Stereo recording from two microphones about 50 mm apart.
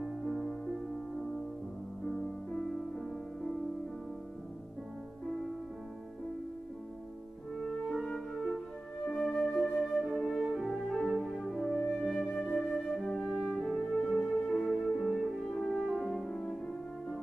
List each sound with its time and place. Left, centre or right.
1.1 s music: centre
2.6 s music: centre
7.6 s music: centre
9.1 s flute: centre
11.1 s music: centre
12.3 s flute: left
13.2 s french horn: centre